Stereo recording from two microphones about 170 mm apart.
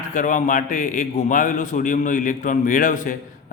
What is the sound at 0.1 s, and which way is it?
A man's voice, 50° left (ahead or behind).